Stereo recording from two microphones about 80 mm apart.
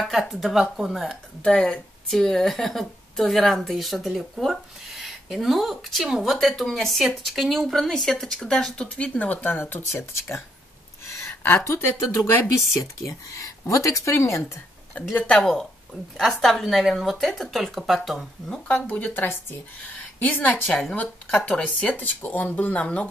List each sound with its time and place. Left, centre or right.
0.0 s speech: centre
1.4 s speech: centre; by 10.4 s left
11.6 s speech: left
15.1 s speech: centre
18.7 s a woman's voice: left